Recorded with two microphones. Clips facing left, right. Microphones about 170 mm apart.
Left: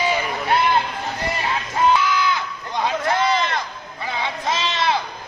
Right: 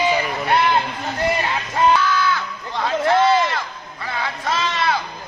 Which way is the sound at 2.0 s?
15° left (ahead or behind).